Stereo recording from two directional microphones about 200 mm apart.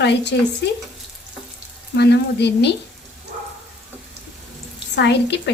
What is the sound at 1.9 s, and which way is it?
Speech, 60° left (ahead or behind).